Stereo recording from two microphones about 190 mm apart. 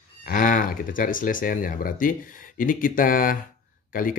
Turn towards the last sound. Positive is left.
turn(degrees=45)  # may be behind; listen again after turning